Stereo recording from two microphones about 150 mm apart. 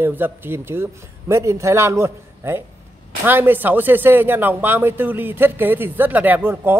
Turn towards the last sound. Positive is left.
turn(degrees=-15)  # may be behind; listen again after turning